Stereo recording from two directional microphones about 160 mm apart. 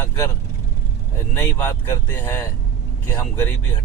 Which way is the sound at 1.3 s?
10° left (ahead or behind).